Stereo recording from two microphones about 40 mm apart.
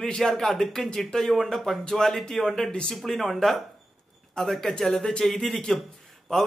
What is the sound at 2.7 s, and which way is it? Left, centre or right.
Speech, left.